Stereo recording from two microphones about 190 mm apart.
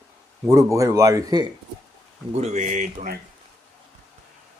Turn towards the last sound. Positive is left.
turn(degrees=-45)  # may be behind; listen again after turning